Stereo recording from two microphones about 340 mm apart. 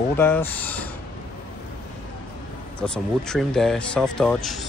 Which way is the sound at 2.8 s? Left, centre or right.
Centre.